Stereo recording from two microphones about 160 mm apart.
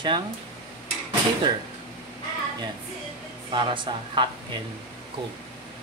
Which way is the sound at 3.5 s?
30° right (ahead or behind).